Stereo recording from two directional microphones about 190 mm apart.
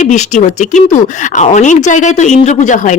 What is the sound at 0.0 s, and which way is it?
Speech, 40° left (ahead or behind).